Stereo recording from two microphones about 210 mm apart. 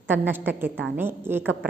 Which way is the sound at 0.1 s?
10° right (ahead or behind).